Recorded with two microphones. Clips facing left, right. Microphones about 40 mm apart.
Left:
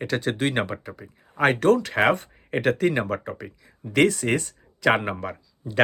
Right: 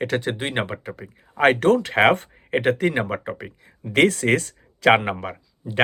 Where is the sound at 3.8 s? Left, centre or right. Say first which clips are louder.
Right 2 dB; right.